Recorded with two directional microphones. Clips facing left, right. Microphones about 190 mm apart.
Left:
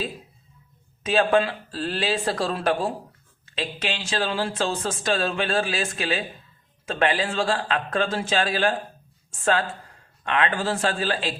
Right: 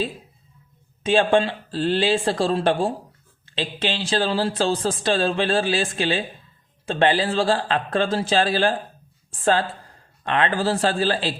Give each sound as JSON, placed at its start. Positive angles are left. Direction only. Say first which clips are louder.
{"t": 1.0, "sound": "speech", "louder": "right 2 dB", "side_deg": -30}